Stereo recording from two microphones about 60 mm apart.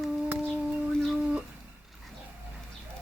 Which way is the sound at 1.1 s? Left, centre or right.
Right.